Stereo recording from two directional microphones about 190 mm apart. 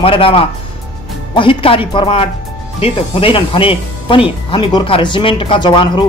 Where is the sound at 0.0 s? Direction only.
30° left (ahead or behind).